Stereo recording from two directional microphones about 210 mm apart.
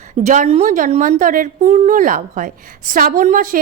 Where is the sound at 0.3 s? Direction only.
30° right (ahead or behind).